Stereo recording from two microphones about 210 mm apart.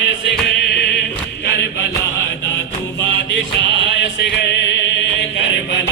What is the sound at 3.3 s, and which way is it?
Music, 60° left (ahead or behind).